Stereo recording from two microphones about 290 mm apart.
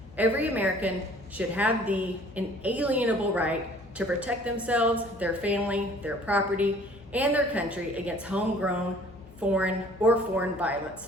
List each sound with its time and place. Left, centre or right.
0.2 s a woman's voice: centre